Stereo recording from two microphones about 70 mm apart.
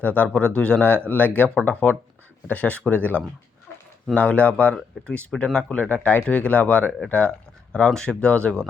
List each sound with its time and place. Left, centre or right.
0.2 s speech: centre
5.9 s speech: left